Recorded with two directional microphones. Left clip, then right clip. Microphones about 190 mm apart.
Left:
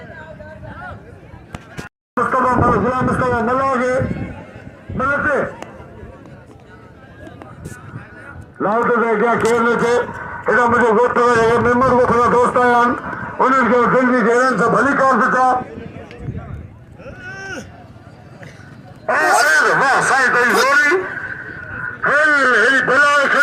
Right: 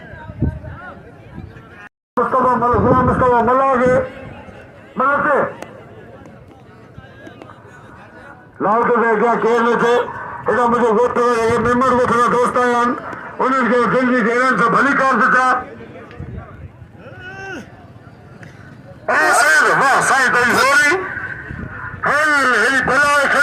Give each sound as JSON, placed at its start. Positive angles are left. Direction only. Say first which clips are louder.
{"t": 2.1, "sound": "a sound", "louder": "right 1 dB", "side_deg": 40}
{"t": 3.1, "sound": "a man's voice", "louder": "right 4 dB", "side_deg": 30}
{"t": 8.5, "sound": "a man's voice", "louder": "right 1 dB", "side_deg": 15}
{"t": 9.5, "sound": "speech", "louder": "right 1 dB", "side_deg": 5}
{"t": 10.4, "sound": "a man's voice", "louder": "left 1 dB", "side_deg": -10}
{"t": 14.3, "sound": "a man's voice", "louder": "even", "side_deg": -40}
{"t": 17.2, "sound": "a sound", "louder": "left 1 dB", "side_deg": 25}
{"t": 19.0, "sound": "speech", "louder": "right 1 dB", "side_deg": -60}